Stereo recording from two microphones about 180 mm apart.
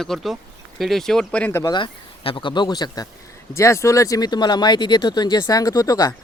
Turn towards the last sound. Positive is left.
turn(degrees=20)  # may be behind; listen again after turning